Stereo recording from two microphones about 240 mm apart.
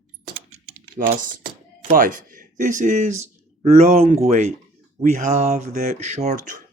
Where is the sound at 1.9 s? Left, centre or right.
Right.